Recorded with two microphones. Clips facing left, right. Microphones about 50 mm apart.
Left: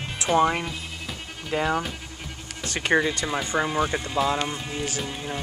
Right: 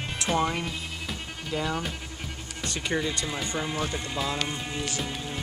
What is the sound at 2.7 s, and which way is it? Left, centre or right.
Speech, left.